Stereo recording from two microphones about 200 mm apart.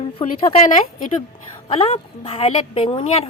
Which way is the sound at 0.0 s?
30° left (ahead or behind).